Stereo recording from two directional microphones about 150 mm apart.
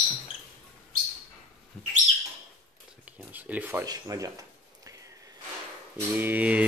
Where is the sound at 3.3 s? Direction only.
10° right (ahead or behind).